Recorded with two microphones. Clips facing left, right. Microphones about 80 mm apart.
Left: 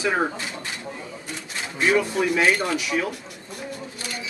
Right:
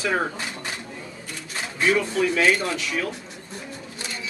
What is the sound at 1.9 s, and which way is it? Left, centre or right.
A man's voice, centre.